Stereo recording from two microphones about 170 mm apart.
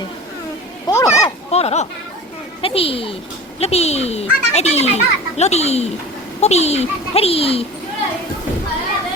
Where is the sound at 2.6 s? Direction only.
35° left (ahead or behind).